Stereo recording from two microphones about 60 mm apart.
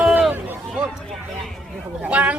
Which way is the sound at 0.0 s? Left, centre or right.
Right.